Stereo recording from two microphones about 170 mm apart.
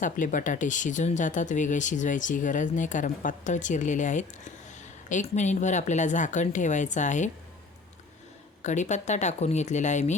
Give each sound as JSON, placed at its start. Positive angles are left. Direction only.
{"t": 0.0, "sound": "speech", "side_deg": 50}
{"t": 8.6, "sound": "speech", "side_deg": 45}